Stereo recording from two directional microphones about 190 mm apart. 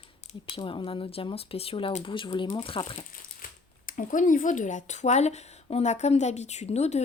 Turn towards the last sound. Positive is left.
turn(degrees=35)  # may be behind; listen again after turning